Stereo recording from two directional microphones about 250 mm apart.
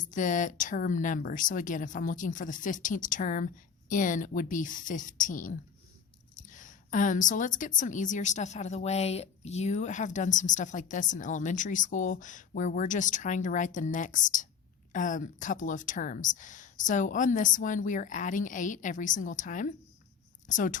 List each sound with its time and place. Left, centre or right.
0.1 s a woman's voice: left